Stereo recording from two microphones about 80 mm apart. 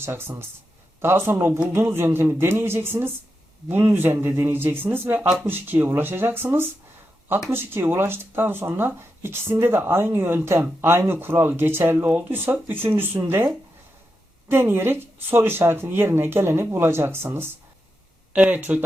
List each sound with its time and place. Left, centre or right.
0.0 s speech: right
14.4 s speech: right
18.3 s speech: centre